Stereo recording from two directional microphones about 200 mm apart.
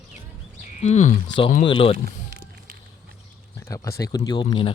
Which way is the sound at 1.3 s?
25° left (ahead or behind).